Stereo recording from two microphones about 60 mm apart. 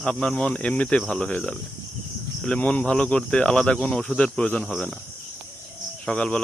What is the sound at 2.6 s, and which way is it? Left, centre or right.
Speech, left.